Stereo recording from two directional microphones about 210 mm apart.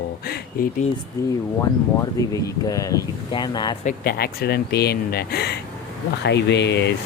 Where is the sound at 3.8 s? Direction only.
45° left (ahead or behind).